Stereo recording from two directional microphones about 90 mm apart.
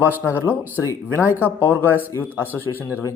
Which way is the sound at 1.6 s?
20° left (ahead or behind).